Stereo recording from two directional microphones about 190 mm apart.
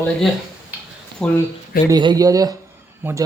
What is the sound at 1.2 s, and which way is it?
Speech, 5° left (ahead or behind).